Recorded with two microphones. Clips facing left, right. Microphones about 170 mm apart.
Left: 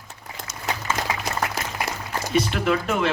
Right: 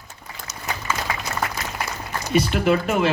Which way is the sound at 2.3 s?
5° right (ahead or behind).